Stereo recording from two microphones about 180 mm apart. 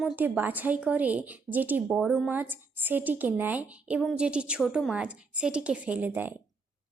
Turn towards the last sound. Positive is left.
turn(degrees=-10)  # may be behind; listen again after turning